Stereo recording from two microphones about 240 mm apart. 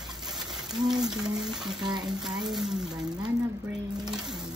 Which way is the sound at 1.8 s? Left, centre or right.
Centre.